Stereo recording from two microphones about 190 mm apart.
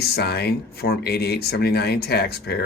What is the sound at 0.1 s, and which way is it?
Speech, 55° left (ahead or behind).